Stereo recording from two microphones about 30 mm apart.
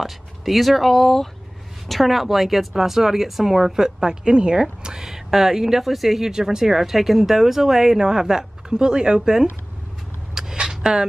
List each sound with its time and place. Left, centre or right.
0.0 s a woman's voice: centre; by 5.0 s right
5.0 s speech: centre
6.3 s speech: centre
6.6 s a woman's voice: centre
10.3 s a sound: right